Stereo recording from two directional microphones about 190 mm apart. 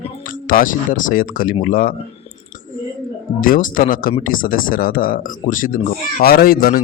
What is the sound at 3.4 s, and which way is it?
Speech, 45° left (ahead or behind).